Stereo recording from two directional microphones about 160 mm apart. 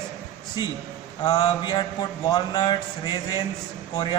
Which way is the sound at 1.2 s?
25° left (ahead or behind).